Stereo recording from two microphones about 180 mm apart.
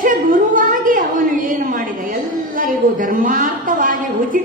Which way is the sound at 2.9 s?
50° right (ahead or behind).